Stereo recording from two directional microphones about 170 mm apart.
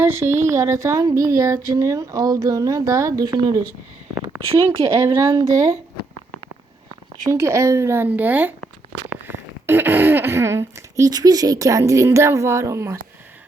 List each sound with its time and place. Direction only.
0.0 s speech: 15° right (ahead or behind)
7.3 s speech: 15° right (ahead or behind)